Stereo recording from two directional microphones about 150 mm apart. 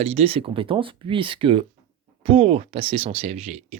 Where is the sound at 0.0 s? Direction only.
45° right (ahead or behind).